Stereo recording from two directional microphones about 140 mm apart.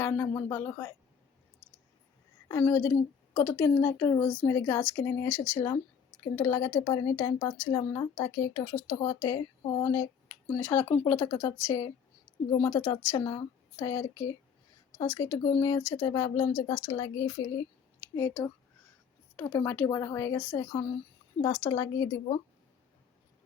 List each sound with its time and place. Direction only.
0.0 s speech: 20° left (ahead or behind)
2.5 s speech: 20° left (ahead or behind); by 17.5 s 35° left (ahead or behind)
18.2 s speech: 20° left (ahead or behind)